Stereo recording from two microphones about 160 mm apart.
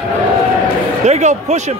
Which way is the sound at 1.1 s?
45° right (ahead or behind).